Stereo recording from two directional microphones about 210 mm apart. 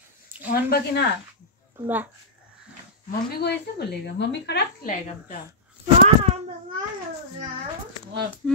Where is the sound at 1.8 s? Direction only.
10° right (ahead or behind).